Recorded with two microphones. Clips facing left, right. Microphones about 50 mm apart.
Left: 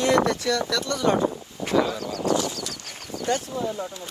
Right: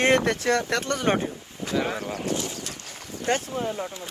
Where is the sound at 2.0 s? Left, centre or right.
Right.